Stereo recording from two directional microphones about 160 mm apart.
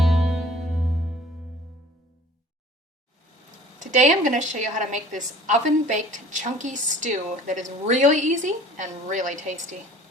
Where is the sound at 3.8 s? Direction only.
50° right (ahead or behind).